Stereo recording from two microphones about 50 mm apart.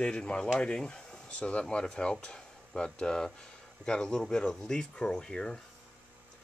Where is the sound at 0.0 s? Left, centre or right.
Left.